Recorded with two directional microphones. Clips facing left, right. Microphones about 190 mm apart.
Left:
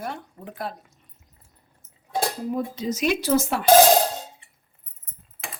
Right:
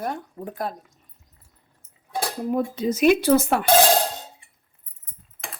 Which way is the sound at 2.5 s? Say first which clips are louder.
Right 3 dB; 55° right (ahead or behind).